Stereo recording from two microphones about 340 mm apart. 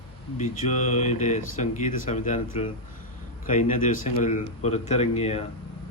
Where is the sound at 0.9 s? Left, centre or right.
Centre.